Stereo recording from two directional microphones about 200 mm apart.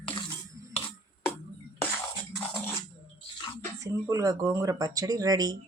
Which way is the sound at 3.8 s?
15° right (ahead or behind).